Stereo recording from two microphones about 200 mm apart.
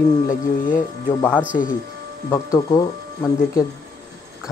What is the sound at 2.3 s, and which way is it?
Speech, 20° left (ahead or behind).